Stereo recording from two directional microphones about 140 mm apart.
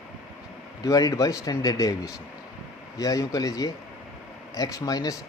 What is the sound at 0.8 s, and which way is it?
Speech, 25° left (ahead or behind).